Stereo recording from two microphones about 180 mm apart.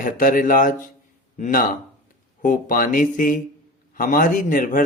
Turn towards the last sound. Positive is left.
turn(degrees=45)  # may be behind; listen again after turning